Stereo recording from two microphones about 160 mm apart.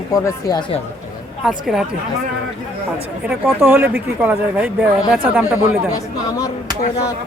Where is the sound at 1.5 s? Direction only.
5° right (ahead or behind).